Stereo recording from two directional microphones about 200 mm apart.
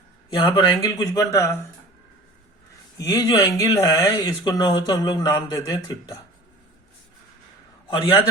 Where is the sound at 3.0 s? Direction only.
15° left (ahead or behind).